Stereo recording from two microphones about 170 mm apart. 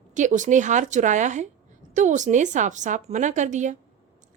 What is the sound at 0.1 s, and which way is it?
A woman's voice, 45° right (ahead or behind).